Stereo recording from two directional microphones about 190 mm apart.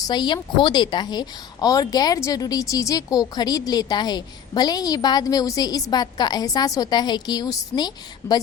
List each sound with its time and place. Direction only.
0.0 s a woman's voice: 20° left (ahead or behind)